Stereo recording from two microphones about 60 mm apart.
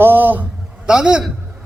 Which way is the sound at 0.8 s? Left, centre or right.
Centre.